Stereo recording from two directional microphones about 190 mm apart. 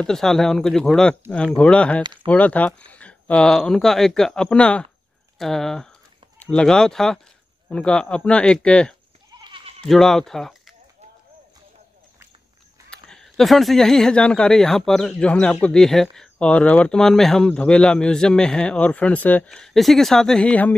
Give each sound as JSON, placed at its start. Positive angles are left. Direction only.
{"t": 0.0, "sound": "speech", "side_deg": 5}
{"t": 9.4, "sound": "bleat", "side_deg": -30}
{"t": 9.8, "sound": "speech", "side_deg": 0}
{"t": 12.9, "sound": "speech", "side_deg": 5}